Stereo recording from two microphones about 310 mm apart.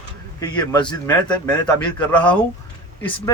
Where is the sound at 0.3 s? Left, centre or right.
Centre.